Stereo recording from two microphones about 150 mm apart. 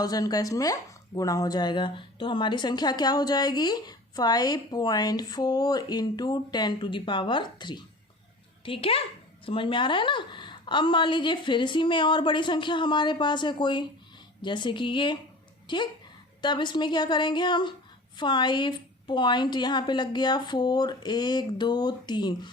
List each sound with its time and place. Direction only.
0.0 s a woman's voice: 25° left (ahead or behind)